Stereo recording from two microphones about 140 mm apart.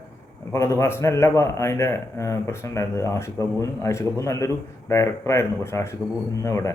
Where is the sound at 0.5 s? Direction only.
20° left (ahead or behind).